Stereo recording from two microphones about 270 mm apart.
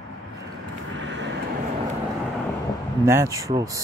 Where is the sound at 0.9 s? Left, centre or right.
Right.